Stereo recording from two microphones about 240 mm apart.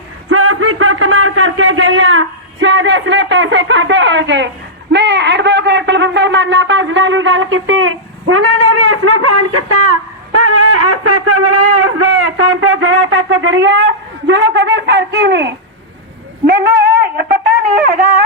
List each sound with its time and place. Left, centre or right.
0.3 s a man's voice: right
4.9 s shofar: right
16.5 s a sound: right